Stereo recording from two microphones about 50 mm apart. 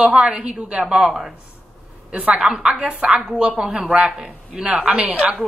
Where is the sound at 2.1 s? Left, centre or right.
Right.